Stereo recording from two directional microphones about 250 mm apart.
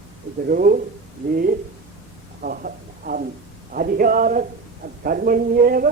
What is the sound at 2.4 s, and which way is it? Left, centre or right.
A man's voice, right.